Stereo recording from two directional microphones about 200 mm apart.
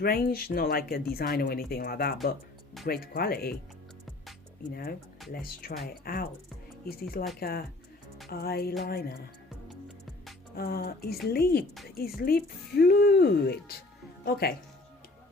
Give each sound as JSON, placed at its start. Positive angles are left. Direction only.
{"t": 0.0, "sound": "speech", "side_deg": 50}
{"t": 4.7, "sound": "speech", "side_deg": 50}
{"t": 7.3, "sound": "speech", "side_deg": 50}
{"t": 10.5, "sound": "speech", "side_deg": 50}